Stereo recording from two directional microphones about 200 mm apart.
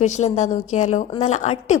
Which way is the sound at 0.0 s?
35° left (ahead or behind).